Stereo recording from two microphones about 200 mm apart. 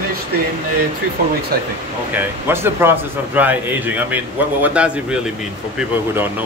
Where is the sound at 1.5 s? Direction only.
50° right (ahead or behind).